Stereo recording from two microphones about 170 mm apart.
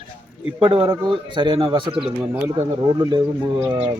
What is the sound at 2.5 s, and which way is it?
Speech, 25° right (ahead or behind).